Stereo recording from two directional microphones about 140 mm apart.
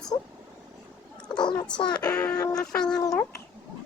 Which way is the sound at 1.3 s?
30° left (ahead or behind).